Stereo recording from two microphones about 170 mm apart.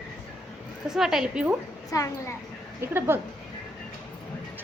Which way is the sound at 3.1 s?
15° right (ahead or behind).